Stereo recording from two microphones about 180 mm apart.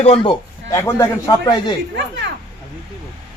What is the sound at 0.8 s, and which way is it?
Speech, 15° left (ahead or behind).